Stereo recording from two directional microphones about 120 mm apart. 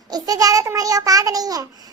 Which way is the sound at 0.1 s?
30° right (ahead or behind).